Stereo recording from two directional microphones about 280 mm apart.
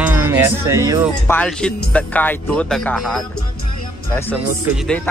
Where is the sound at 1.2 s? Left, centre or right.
Centre.